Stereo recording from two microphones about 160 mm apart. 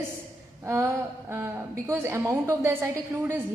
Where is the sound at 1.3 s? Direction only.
15° right (ahead or behind).